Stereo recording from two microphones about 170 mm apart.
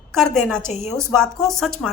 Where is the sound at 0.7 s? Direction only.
40° left (ahead or behind).